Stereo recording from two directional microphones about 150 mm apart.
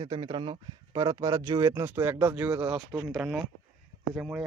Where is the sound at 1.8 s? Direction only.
15° right (ahead or behind).